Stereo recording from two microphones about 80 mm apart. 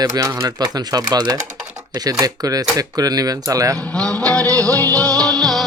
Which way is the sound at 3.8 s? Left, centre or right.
Centre.